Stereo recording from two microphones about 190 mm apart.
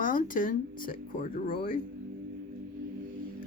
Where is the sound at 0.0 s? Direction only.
45° left (ahead or behind).